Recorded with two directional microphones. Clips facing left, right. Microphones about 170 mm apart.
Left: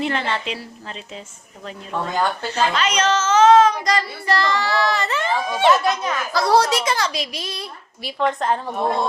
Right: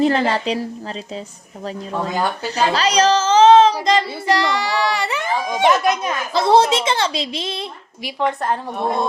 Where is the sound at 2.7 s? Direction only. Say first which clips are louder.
Right 4 dB; 35° right (ahead or behind).